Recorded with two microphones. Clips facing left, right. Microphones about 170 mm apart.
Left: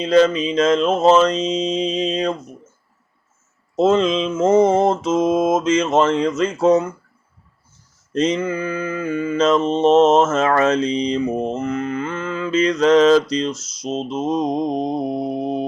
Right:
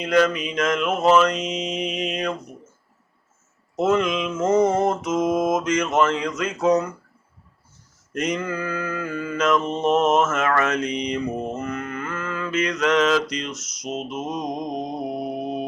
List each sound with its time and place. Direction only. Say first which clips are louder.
0.0 s mantra: left 5 dB; 25° left (ahead or behind)
3.8 s mantra: left 5 dB; 25° left (ahead or behind)
8.1 s mantra: left 6 dB; 25° left (ahead or behind)